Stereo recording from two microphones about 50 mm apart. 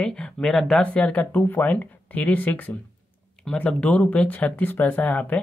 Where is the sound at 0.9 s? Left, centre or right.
Left.